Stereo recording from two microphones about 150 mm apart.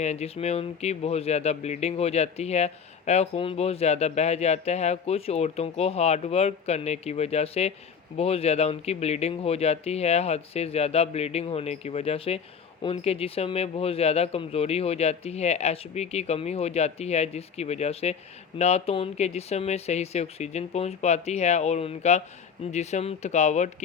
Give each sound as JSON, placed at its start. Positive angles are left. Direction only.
{"t": 0.0, "sound": "speech", "side_deg": 45}